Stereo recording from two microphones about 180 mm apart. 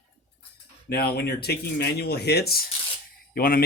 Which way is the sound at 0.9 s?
60° left (ahead or behind).